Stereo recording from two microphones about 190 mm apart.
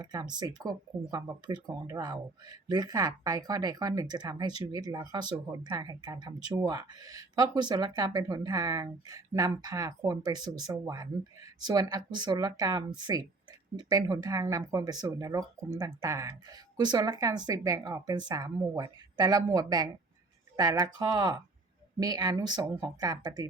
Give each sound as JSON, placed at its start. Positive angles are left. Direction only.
{"t": 0.0, "sound": "speech", "side_deg": -20}